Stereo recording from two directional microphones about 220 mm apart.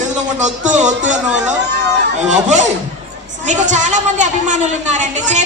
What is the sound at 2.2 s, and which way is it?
A woman's voice, 35° right (ahead or behind).